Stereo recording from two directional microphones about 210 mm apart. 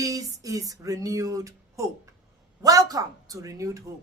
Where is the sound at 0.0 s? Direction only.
15° right (ahead or behind).